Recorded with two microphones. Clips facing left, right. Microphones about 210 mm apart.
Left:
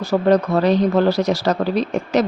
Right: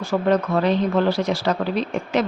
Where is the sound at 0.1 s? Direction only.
40° left (ahead or behind).